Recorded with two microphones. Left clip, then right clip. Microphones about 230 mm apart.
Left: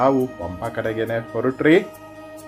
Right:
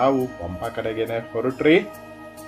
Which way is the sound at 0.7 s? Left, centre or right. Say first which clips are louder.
Left 2 dB; left.